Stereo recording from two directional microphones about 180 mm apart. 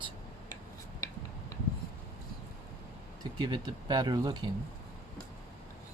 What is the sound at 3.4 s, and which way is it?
Speech, 25° right (ahead or behind).